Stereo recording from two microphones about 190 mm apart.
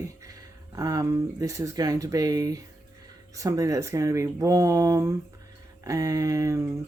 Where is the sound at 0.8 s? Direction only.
20° right (ahead or behind).